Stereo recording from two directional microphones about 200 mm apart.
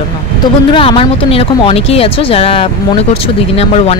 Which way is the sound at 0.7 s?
25° left (ahead or behind).